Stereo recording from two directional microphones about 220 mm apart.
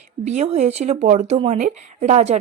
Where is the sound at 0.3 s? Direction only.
30° right (ahead or behind).